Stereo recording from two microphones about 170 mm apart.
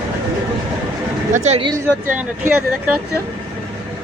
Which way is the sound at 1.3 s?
40° right (ahead or behind).